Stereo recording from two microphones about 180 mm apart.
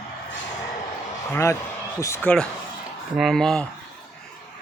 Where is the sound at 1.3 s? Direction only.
15° left (ahead or behind).